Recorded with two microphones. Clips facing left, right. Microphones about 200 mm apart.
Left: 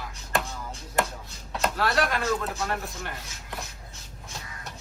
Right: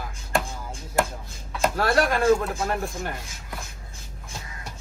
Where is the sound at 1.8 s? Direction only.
50° right (ahead or behind).